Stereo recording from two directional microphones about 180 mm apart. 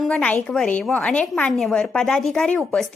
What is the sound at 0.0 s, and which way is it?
A woman's voice, 5° left (ahead or behind).